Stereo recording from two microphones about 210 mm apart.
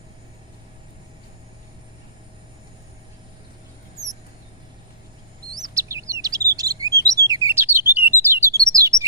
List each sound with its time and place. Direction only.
5.5 s bird: 20° right (ahead or behind)
6.2 s chirp: 15° right (ahead or behind)